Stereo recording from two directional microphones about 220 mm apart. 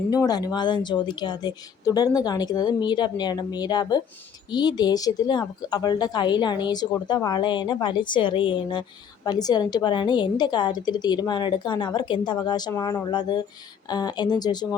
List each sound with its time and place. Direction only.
0.1 s a woman's voice: 15° left (ahead or behind)